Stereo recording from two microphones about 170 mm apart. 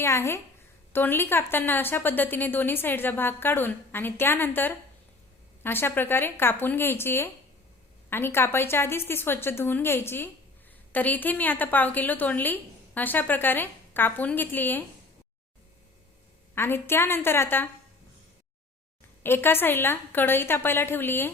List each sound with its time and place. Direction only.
0.0 s a woman's voice: 15° left (ahead or behind)
16.6 s a woman's voice: 15° left (ahead or behind)
19.2 s a woman's voice: 15° left (ahead or behind)